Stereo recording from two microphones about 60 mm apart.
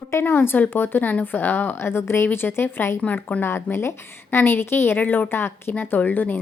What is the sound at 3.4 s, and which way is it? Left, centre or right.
A woman's voice, left.